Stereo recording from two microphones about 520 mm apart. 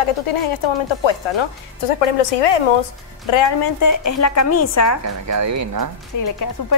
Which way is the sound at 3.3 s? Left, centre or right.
Left.